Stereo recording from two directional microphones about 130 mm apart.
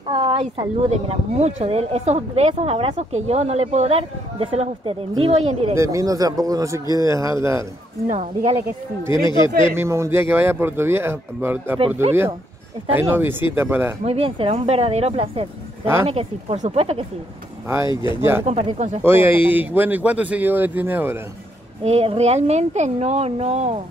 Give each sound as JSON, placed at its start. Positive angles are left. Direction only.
{"t": 0.1, "sound": "a sound", "side_deg": -40}
{"t": 0.8, "sound": "speech", "side_deg": -55}
{"t": 5.8, "sound": "a man's voice", "side_deg": -25}
{"t": 8.1, "sound": "speech", "side_deg": -65}
{"t": 8.6, "sound": "a man's voice", "side_deg": -20}
{"t": 12.9, "sound": "speech", "side_deg": -15}
{"t": 14.0, "sound": "speech", "side_deg": -50}
{"t": 17.8, "sound": "speech", "side_deg": 35}
{"t": 18.4, "sound": "speech", "side_deg": -50}
{"t": 19.0, "sound": "speech", "side_deg": -15}
{"t": 21.8, "sound": "speech", "side_deg": -55}